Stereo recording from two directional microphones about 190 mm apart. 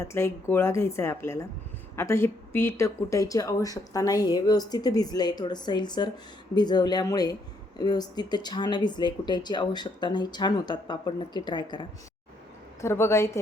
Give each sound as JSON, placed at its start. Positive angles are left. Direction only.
{"t": 0.0, "sound": "speech", "side_deg": 15}